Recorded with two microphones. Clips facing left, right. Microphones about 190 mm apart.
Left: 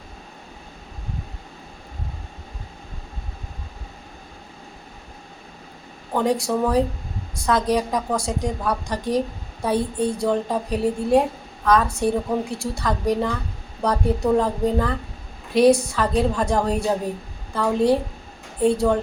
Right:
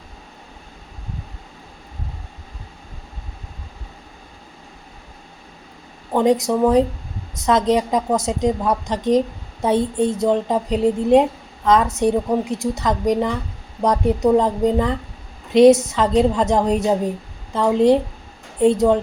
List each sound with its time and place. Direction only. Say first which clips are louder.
6.1 s a woman's voice: right 5 dB; 20° right (ahead or behind)